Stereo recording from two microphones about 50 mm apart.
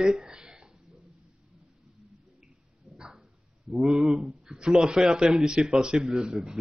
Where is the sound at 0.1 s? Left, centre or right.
Centre.